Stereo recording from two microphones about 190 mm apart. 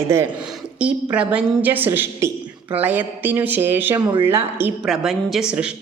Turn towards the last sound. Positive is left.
turn(degrees=-5)  # may be behind; listen again after turning